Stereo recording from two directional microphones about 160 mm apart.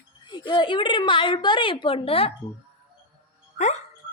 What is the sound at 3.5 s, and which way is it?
Speech, 45° left (ahead or behind).